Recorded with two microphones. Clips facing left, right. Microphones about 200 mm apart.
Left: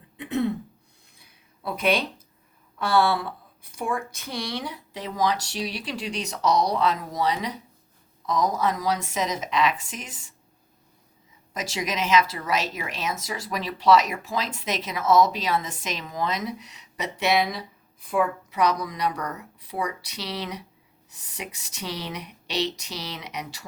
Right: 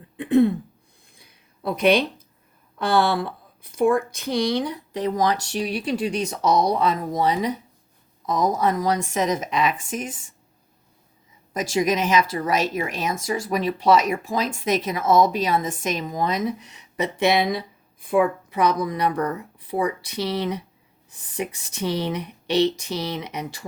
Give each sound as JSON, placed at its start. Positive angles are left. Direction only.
{"t": 0.2, "sound": "throat clearing", "side_deg": -50}
{"t": 2.7, "sound": "speech", "side_deg": -55}
{"t": 4.9, "sound": "speech", "side_deg": -50}
{"t": 11.5, "sound": "speech", "side_deg": -50}